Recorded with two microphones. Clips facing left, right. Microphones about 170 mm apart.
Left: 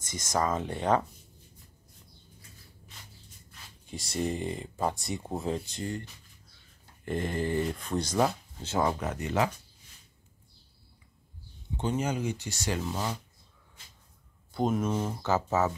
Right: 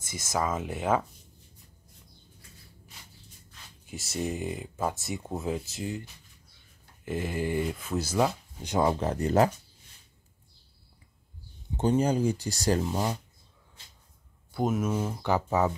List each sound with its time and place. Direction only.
0.0 s speech: 10° right (ahead or behind)
3.8 s speech: 5° right (ahead or behind)
7.1 s speech: 5° right (ahead or behind)
8.9 s speech: 30° right (ahead or behind)
11.7 s speech: 35° right (ahead or behind)
12.8 s speech: 15° right (ahead or behind)
14.5 s speech: 5° right (ahead or behind)